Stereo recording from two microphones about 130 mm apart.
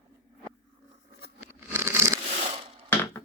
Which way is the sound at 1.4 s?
15° right (ahead or behind).